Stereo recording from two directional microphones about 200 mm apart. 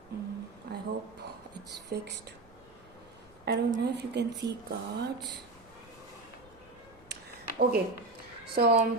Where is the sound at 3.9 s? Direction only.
55° right (ahead or behind).